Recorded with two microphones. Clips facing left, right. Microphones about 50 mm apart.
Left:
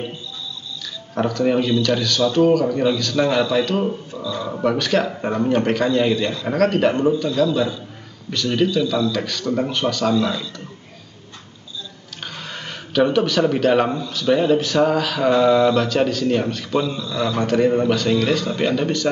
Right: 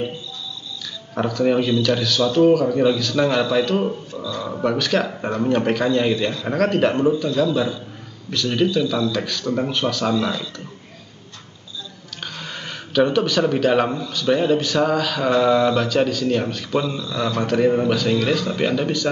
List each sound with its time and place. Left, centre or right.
1.1 s speech: centre
12.2 s speech: centre